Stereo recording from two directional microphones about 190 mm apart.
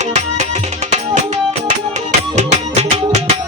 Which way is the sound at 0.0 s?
40° right (ahead or behind).